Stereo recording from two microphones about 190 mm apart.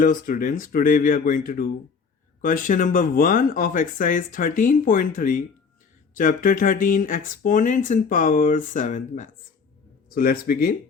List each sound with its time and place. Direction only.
0.0 s speech: 45° left (ahead or behind)